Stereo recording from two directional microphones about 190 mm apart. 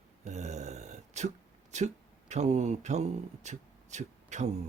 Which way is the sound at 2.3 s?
35° right (ahead or behind).